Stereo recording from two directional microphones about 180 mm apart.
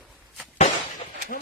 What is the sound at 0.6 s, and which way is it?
Breaking, 45° left (ahead or behind).